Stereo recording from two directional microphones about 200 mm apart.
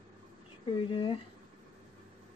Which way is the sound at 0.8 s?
25° left (ahead or behind).